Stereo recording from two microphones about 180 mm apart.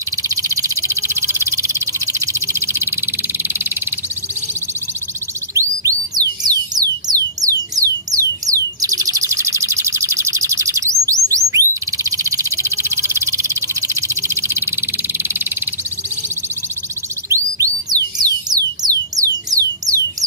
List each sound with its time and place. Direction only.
0.3 s frog: 20° right (ahead or behind)
5.5 s music: 15° right (ahead or behind)
17.3 s music: 20° right (ahead or behind)